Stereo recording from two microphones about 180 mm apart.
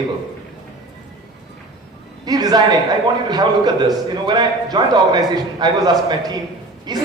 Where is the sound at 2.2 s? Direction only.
20° right (ahead or behind).